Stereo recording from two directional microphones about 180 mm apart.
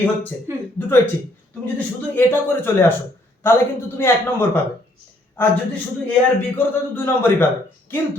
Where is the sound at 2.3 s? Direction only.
10° left (ahead or behind).